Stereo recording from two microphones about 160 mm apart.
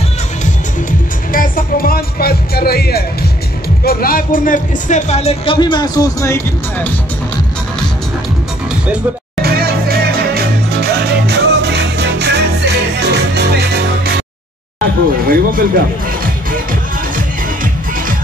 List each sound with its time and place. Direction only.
1.3 s speech: 60° left (ahead or behind); by 6.9 s 20° left (ahead or behind)
9.4 s music: 70° right (ahead or behind); by 14.1 s 90° right
15.2 s speech: 60° right (ahead or behind)